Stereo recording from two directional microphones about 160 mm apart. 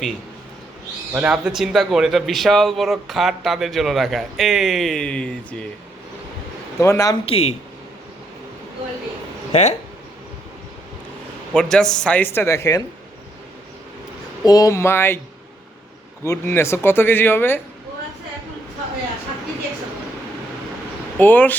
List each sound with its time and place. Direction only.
1.1 s a man's voice: 5° right (ahead or behind)
6.7 s speech: 15° left (ahead or behind)
7.3 s speech: 40° left (ahead or behind)
9.5 s speech: 45° left (ahead or behind)
11.5 s speech: 5° left (ahead or behind); by 12.8 s 20° left (ahead or behind)
14.4 s speech: 20° left (ahead or behind)
16.2 s speech: 15° left (ahead or behind)
21.2 s speech: 10° left (ahead or behind)